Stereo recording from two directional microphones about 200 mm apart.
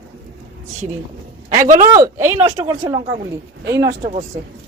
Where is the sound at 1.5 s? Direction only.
40° right (ahead or behind).